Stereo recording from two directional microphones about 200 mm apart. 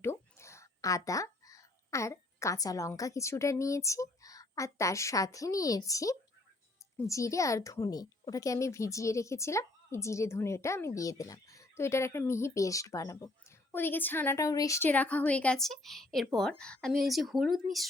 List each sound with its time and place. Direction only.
0.0 s a woman's voice: 15° left (ahead or behind)